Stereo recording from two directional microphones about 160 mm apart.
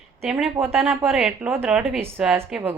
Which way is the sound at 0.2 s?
Centre (ahead or behind).